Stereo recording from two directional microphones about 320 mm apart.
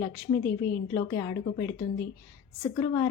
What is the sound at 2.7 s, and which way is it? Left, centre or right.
Speech, centre.